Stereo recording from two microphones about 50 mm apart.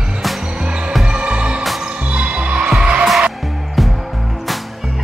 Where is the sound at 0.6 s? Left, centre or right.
Right.